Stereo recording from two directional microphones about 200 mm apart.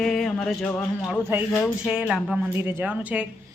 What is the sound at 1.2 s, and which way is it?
A woman's voice, 10° right (ahead or behind).